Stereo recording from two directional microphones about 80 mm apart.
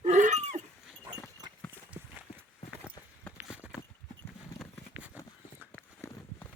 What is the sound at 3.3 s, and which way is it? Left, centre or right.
Clip-clop, right.